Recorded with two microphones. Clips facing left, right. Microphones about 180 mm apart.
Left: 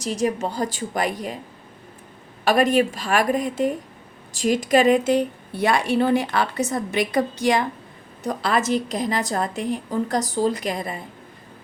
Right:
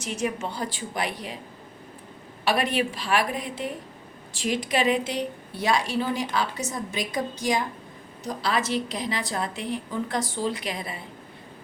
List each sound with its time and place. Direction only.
0.0 s a woman's voice: 35° left (ahead or behind)
2.4 s a woman's voice: 45° left (ahead or behind)